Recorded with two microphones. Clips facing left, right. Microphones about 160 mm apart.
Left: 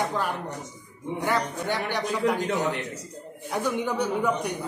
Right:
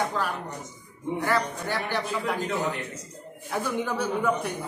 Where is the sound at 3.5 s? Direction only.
15° left (ahead or behind).